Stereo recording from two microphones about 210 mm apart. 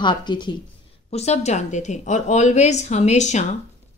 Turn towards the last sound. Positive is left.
turn(degrees=35)  # may be behind; listen again after turning